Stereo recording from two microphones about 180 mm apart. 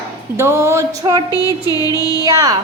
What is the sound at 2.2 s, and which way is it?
Music, 20° right (ahead or behind).